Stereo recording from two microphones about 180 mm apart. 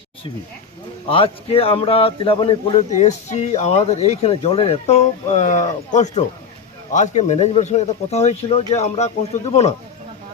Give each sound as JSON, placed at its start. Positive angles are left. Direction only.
{"t": 1.1, "sound": "speech", "side_deg": 30}